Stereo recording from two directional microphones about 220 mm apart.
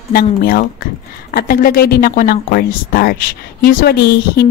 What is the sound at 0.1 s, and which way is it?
A woman's voice, 45° left (ahead or behind).